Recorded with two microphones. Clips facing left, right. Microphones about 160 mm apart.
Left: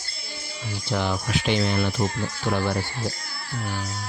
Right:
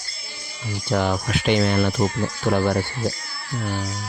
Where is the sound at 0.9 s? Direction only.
50° right (ahead or behind).